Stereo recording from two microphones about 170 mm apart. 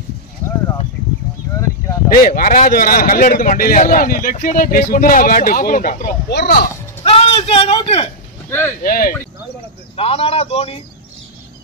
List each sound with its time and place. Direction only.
2.1 s a man's voice: 55° left (ahead or behind)
6.3 s speech: 65° left (ahead or behind)
7.0 s a sound: 35° left (ahead or behind)
8.5 s speech: 10° left (ahead or behind)
8.8 s speech: 55° left (ahead or behind)
9.9 s a man's voice: 35° left (ahead or behind)